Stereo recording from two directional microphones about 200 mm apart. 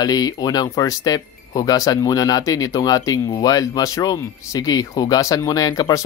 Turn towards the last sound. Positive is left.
turn(degrees=20)  # may be behind; listen again after turning